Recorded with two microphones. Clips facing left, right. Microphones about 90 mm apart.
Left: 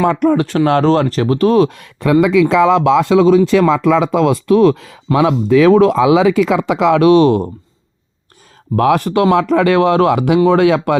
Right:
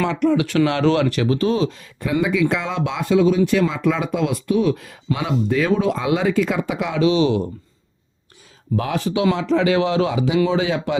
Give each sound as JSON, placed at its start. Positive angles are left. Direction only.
{"t": 0.0, "sound": "speech", "side_deg": 45}
{"t": 2.2, "sound": "speech", "side_deg": 90}
{"t": 7.1, "sound": "speech", "side_deg": 50}
{"t": 8.7, "sound": "speech", "side_deg": 60}